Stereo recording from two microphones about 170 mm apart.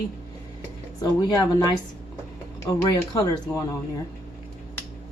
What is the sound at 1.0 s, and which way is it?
Speech, 20° left (ahead or behind).